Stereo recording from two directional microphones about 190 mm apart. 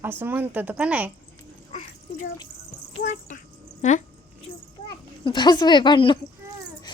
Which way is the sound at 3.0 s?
40° left (ahead or behind).